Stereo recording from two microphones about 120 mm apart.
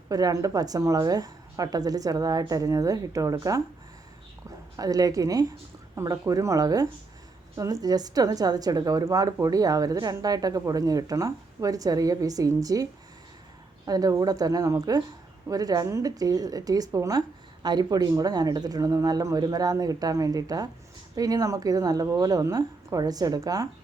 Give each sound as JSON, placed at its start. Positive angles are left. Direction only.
{"t": 0.1, "sound": "a woman's voice", "side_deg": -30}
{"t": 4.8, "sound": "a woman's voice", "side_deg": -30}